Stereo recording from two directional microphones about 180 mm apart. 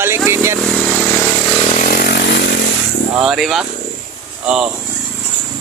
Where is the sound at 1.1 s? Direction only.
20° left (ahead or behind).